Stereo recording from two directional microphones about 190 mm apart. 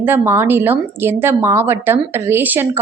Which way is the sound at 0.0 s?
10° right (ahead or behind).